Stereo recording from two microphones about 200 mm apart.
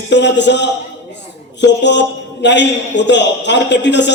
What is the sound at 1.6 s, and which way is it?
A man's voice, 60° left (ahead or behind).